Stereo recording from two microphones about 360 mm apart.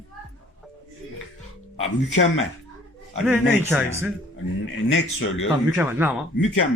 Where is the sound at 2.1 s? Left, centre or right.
Left.